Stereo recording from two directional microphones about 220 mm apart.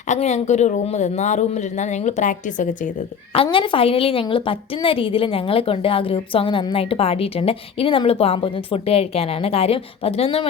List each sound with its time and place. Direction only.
0.1 s speech: 30° left (ahead or behind)
3.3 s a woman's voice: 25° left (ahead or behind)